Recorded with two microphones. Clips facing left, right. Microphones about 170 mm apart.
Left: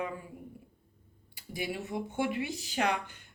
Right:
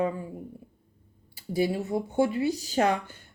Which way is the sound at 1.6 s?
35° right (ahead or behind).